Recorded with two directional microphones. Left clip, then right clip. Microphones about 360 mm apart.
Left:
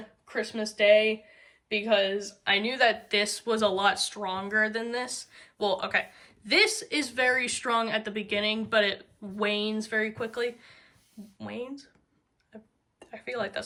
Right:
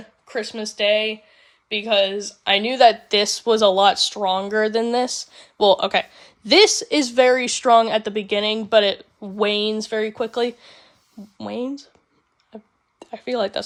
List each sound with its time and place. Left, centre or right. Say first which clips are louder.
0.3 s speech: right 5 dB; centre
13.0 s speech: right 10 dB; centre